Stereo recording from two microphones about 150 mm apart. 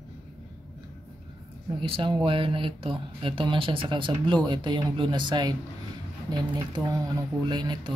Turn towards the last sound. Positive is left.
turn(degrees=-30)  # may be behind; listen again after turning